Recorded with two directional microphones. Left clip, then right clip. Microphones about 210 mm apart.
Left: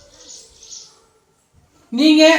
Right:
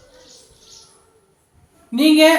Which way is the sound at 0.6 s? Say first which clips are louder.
Left 8 dB; 45° right (ahead or behind).